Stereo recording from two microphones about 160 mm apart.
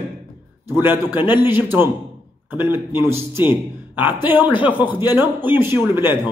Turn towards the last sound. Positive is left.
turn(degrees=-15)  # may be behind; listen again after turning